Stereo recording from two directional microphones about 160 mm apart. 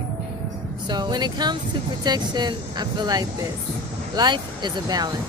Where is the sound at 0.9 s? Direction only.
25° right (ahead or behind).